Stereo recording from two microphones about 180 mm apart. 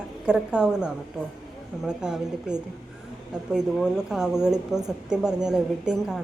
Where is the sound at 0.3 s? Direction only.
5° right (ahead or behind).